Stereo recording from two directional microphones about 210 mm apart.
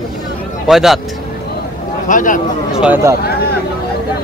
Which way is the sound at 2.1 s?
40° left (ahead or behind).